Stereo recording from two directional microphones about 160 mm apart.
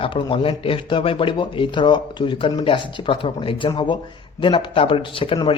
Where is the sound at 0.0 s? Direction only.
35° left (ahead or behind).